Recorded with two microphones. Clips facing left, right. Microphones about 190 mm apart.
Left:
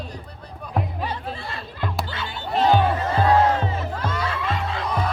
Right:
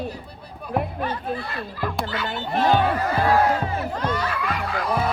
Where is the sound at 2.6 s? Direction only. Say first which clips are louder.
Left 1 dB; 20° left (ahead or behind).